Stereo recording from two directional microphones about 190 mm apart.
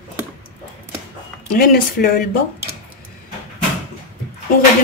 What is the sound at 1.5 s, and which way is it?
Speech, 50° left (ahead or behind).